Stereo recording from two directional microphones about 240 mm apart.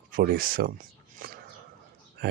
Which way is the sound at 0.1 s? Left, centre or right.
Right.